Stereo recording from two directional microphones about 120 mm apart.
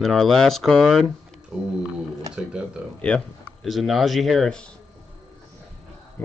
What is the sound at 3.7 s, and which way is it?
Speech, centre (ahead or behind).